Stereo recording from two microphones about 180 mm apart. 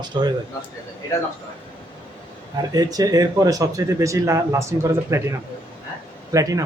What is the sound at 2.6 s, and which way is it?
A man's voice, 20° right (ahead or behind).